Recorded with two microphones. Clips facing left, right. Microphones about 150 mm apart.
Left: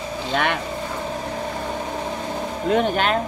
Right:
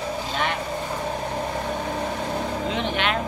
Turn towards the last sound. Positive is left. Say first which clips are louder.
# left 6 dB
turn(degrees=40)  # may be behind; listen again after turning